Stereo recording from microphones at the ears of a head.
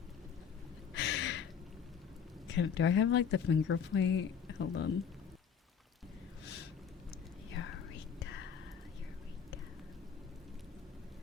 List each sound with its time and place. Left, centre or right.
0.9 s a sound: left
2.5 s speech: left
7.5 s whispering: left